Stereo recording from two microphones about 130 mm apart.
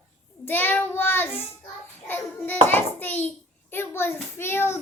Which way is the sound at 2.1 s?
15° left (ahead or behind).